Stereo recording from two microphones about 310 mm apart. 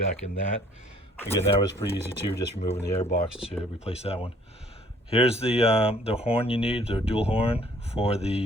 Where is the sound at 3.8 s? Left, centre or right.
Centre.